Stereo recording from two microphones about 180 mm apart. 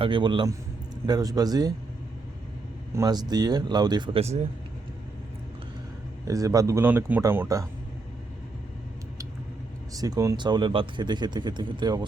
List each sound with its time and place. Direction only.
0.0 s speech: 25° right (ahead or behind)
2.9 s speech: 20° right (ahead or behind); by 4.4 s 35° right (ahead or behind)
6.2 s speech: 20° right (ahead or behind)
9.9 s speech: 20° right (ahead or behind)